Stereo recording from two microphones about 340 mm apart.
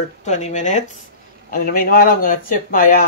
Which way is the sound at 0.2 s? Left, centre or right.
Centre.